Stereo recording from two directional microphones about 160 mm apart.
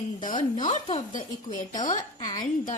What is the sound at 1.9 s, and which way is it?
Speech, 25° left (ahead or behind).